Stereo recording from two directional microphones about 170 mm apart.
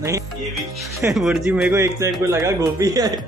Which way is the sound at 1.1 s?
Centre (ahead or behind).